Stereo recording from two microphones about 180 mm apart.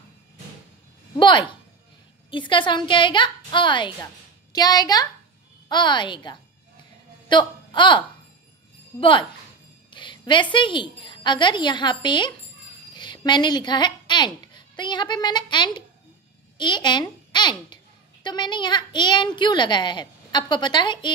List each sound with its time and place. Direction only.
1.1 s a woman's voice: 25° left (ahead or behind)
8.9 s speech: 10° left (ahead or behind)
9.8 s music: 25° left (ahead or behind)
10.5 s a woman's voice: 25° left (ahead or behind)